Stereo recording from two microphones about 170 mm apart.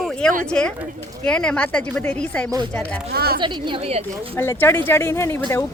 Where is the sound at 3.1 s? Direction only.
65° right (ahead or behind).